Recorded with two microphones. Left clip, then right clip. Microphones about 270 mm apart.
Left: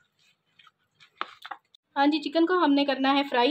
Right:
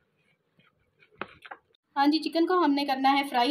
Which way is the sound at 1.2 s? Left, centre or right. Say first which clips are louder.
Left 4 dB; left.